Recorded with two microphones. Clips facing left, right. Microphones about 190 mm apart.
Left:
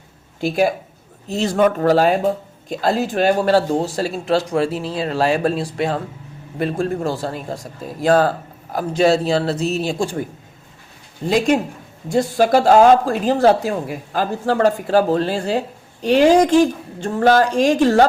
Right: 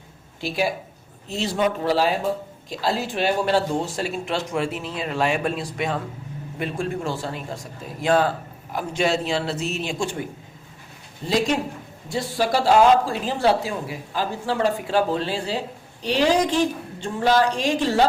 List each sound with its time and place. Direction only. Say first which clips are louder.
0.4 s speech: left 7 dB; 50° left (ahead or behind)
11.3 s speech: left 5 dB; 50° left (ahead or behind)